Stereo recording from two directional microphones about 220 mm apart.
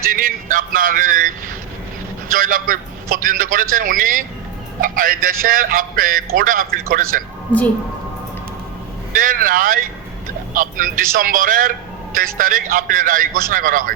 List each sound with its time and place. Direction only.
0.1 s male singing: 40° right (ahead or behind)
2.3 s a man's voice: 40° right (ahead or behind)
9.1 s a man's voice: 40° right (ahead or behind)